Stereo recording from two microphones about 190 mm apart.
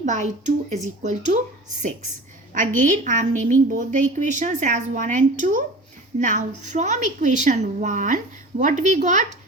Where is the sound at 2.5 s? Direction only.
45° right (ahead or behind).